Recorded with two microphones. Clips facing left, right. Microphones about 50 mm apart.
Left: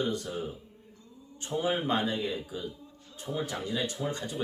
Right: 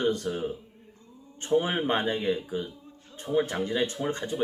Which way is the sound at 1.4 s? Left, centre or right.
Right.